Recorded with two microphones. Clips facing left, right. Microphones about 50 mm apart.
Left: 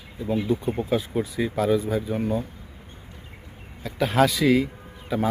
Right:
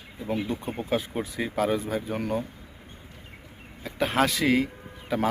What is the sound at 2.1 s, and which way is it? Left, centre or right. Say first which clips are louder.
Speech: left 2 dB; right.